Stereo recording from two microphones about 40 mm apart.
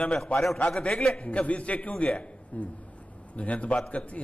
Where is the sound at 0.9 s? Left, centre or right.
Centre.